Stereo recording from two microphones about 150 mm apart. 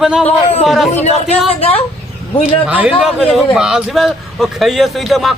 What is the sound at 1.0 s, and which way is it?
Speech, 45° left (ahead or behind).